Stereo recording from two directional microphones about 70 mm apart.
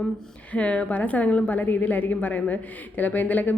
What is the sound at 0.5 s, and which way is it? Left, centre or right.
A woman's voice, centre.